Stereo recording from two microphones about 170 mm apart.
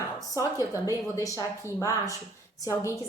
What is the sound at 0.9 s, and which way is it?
A woman's voice, 20° left (ahead or behind).